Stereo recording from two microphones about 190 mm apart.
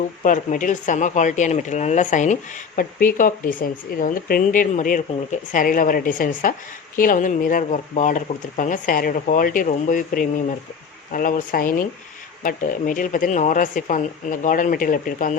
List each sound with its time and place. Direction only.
0.2 s speech: 45° left (ahead or behind)